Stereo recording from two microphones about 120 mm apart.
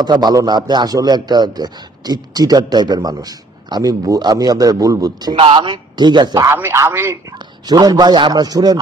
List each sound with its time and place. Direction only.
0.0 s speech: 35° right (ahead or behind)
5.3 s speech: 45° right (ahead or behind)
6.5 s a man's voice: 20° right (ahead or behind)
7.3 s speech: 35° right (ahead or behind)